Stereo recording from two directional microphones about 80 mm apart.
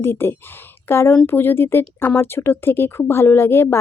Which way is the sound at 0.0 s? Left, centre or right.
Left.